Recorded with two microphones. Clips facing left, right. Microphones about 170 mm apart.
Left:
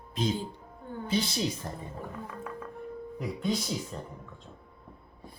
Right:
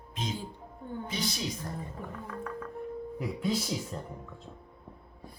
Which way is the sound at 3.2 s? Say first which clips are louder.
Left 1 dB; 5° right (ahead or behind).